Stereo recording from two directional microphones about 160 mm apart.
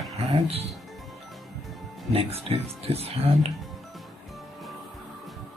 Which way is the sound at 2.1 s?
40° right (ahead or behind).